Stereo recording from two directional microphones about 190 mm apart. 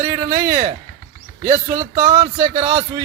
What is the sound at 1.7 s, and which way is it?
Speech, 20° right (ahead or behind).